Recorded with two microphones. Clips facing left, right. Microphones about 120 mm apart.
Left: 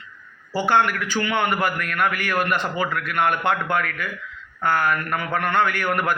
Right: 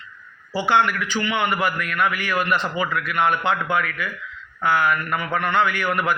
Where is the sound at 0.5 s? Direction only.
45° left (ahead or behind).